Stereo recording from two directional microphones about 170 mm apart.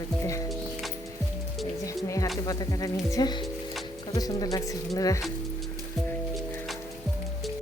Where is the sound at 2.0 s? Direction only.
20° left (ahead or behind).